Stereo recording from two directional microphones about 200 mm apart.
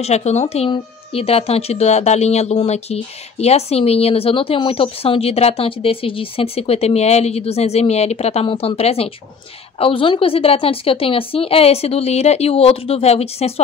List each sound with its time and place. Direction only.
0.0 s a woman's voice: 35° left (ahead or behind)